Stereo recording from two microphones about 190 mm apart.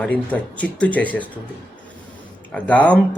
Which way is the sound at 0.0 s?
5° left (ahead or behind).